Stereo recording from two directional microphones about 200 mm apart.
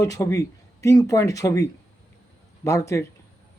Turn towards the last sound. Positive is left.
turn(degrees=15)  # may be behind; listen again after turning